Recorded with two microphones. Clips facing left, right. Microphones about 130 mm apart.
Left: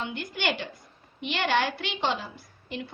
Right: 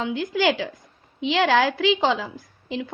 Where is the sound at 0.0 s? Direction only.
90° right.